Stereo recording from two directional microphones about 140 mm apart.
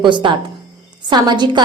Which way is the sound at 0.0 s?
35° right (ahead or behind).